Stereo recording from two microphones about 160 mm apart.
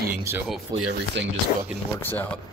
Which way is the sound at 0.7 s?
25° right (ahead or behind).